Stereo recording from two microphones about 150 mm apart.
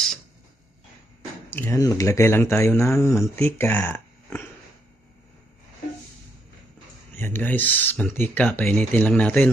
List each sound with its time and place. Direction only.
1.5 s speech: 15° left (ahead or behind)
7.2 s speech: 15° left (ahead or behind)